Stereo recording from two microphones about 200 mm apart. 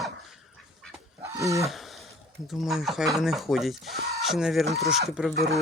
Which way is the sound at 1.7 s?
Centre (ahead or behind).